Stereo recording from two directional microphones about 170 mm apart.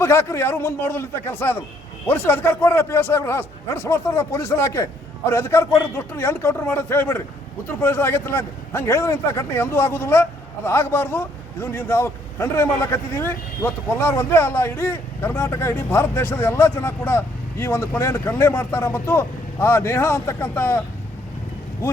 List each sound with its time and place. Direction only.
0.0 s a man's voice: 15° left (ahead or behind)